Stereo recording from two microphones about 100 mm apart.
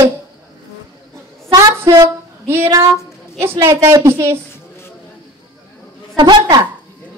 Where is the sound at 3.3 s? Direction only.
30° right (ahead or behind).